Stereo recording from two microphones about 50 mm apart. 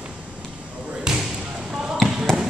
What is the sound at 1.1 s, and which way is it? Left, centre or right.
Basketball bounce, centre.